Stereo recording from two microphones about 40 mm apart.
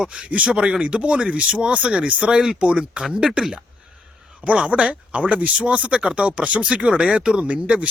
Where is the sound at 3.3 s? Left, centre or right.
Centre.